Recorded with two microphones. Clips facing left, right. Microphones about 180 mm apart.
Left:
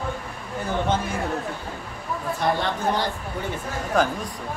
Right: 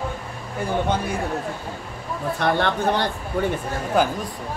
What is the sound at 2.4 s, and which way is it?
Speech, 65° right (ahead or behind).